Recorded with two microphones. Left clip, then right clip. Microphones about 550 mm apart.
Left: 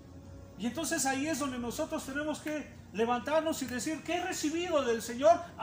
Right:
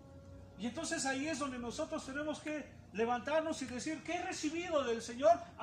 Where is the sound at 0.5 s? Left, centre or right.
Right.